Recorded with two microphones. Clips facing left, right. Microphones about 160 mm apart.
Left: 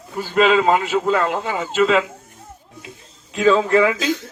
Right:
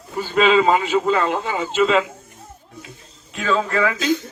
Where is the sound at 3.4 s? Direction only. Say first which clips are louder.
Left 5 dB; 25° left (ahead or behind).